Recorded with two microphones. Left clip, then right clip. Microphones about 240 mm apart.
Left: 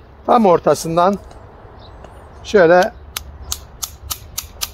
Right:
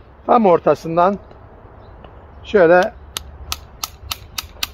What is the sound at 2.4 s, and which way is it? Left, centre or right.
Speech, centre.